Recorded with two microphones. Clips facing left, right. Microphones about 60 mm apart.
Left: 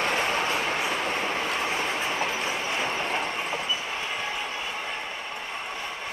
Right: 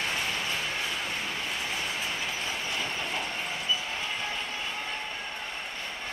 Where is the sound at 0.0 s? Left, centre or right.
Left.